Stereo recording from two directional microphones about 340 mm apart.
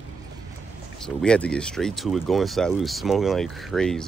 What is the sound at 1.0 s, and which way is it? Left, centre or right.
Speech, centre.